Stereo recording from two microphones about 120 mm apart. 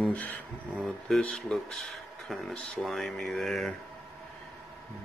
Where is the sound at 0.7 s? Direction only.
5° left (ahead or behind).